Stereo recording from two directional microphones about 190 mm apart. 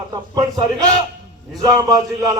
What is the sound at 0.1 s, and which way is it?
Speech, 20° right (ahead or behind).